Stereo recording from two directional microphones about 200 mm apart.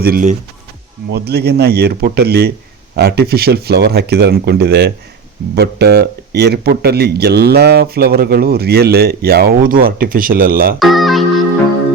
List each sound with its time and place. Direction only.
0.0 s speech: 50° right (ahead or behind)
10.8 s speech: centre (ahead or behind)